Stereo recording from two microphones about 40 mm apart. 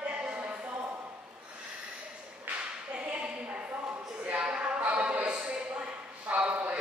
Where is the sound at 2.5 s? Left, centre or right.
Right.